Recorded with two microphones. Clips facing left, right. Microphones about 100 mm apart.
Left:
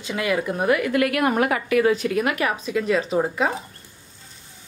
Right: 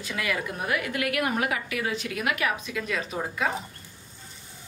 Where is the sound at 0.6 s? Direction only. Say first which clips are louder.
Left 11 dB; 45° left (ahead or behind); by 3.5 s 30° left (ahead or behind).